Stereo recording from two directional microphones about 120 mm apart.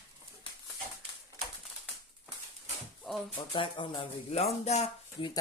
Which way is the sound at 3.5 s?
45° left (ahead or behind).